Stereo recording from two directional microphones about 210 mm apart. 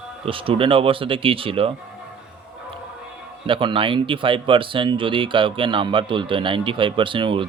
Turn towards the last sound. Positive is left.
turn(degrees=-25)  # may be behind; listen again after turning